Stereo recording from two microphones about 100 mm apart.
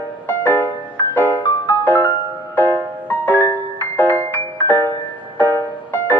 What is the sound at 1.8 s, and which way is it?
Music, 20° left (ahead or behind).